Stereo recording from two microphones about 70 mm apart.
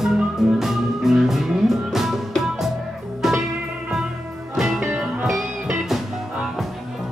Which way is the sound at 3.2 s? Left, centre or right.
Centre.